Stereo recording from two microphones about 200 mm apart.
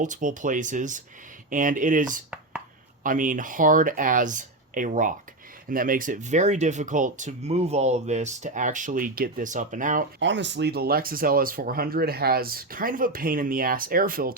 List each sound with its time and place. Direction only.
0.0 s speech: 40° right (ahead or behind)
10.2 s speech: 60° right (ahead or behind); by 14.3 s 45° right (ahead or behind)